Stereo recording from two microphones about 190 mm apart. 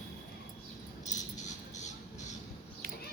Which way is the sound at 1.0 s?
40° left (ahead or behind).